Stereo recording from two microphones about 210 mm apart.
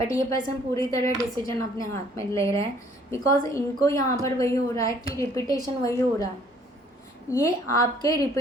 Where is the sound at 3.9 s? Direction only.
15° left (ahead or behind).